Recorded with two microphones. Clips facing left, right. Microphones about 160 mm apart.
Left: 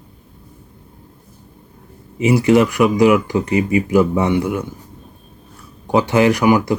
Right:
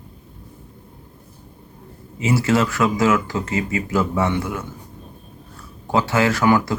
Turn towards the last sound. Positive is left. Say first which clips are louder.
# left 4 dB
turn(degrees=15)  # may be behind; listen again after turning